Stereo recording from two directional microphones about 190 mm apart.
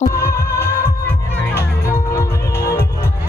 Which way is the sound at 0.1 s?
15° left (ahead or behind).